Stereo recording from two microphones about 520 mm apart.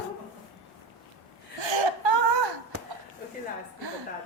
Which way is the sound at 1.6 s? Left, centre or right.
Right.